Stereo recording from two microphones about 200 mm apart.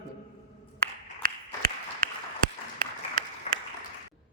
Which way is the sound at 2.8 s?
45° right (ahead or behind).